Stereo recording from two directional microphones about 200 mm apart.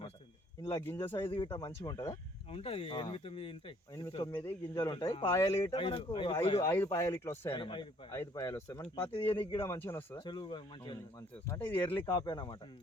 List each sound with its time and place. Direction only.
0.6 s speech: 10° left (ahead or behind)
2.5 s speech: 30° left (ahead or behind)
4.3 s speech: 10° left (ahead or behind)
4.7 s speech: 20° left (ahead or behind)
6.6 s speech: 10° left (ahead or behind)
7.5 s speech: 25° left (ahead or behind)
8.2 s speech: 15° left (ahead or behind)
10.2 s speech: 20° left (ahead or behind)
11.4 s speech: 10° left (ahead or behind)